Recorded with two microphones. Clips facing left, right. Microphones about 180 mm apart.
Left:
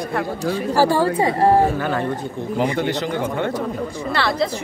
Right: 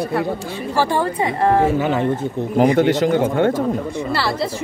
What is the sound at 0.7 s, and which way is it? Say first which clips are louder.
Speech: left 2 dB; 35° left (ahead or behind).